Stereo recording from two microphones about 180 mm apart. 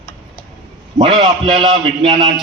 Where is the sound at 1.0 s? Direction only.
20° right (ahead or behind).